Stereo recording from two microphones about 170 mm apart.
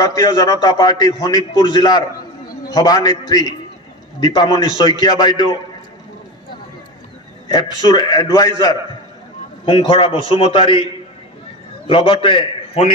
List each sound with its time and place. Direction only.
0.0 s a man's voice: 20° left (ahead or behind)
7.5 s a man's voice: 25° left (ahead or behind)
9.7 s a man's voice: 30° left (ahead or behind)
11.9 s a man's voice: 30° left (ahead or behind)